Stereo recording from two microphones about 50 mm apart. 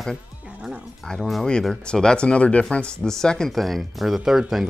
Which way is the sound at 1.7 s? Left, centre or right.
Centre.